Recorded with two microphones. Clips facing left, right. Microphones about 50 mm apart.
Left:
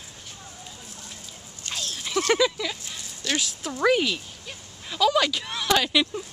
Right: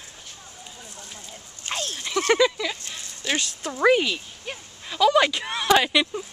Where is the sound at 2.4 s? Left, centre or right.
Centre.